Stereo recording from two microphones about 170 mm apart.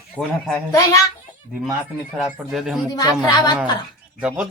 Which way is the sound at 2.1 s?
Centre (ahead or behind).